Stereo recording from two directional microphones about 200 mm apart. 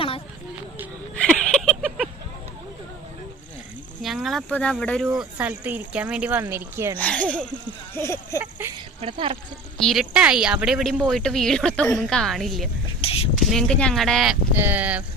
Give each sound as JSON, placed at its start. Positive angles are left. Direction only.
{"t": 1.1, "sound": "a sound", "side_deg": 5}
{"t": 4.0, "sound": "speech", "side_deg": 0}
{"t": 5.0, "sound": "speech", "side_deg": -10}
{"t": 6.9, "sound": "a woman's voice", "side_deg": 5}
{"t": 8.4, "sound": "a sound", "side_deg": -10}
{"t": 9.0, "sound": "speech", "side_deg": -25}
{"t": 9.7, "sound": "a woman's voice", "side_deg": 0}